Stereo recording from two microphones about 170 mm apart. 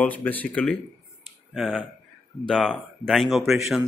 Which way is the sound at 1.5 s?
5° right (ahead or behind).